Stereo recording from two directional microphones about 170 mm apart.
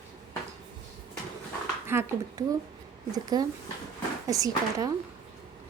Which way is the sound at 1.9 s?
15° right (ahead or behind).